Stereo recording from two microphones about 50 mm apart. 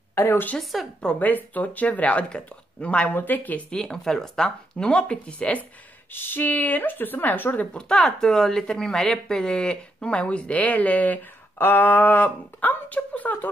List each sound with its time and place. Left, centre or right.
0.1 s speech: left
0.6 s speech: centre
1.2 s speech: left
3.2 s speech: left
3.7 s speech: centre
6.1 s speech: left
7.7 s speech: centre; by 11.1 s left
11.5 s speech: left